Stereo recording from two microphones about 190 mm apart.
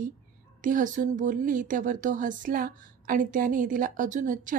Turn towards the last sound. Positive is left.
turn(degrees=-45)  # may be behind; listen again after turning